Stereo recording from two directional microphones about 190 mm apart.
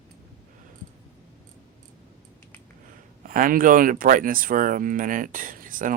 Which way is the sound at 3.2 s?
45° right (ahead or behind).